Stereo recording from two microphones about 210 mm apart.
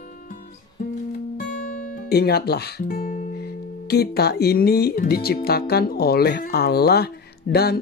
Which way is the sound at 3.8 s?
50° left (ahead or behind).